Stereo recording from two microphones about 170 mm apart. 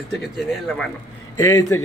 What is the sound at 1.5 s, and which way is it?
Speech, 20° left (ahead or behind).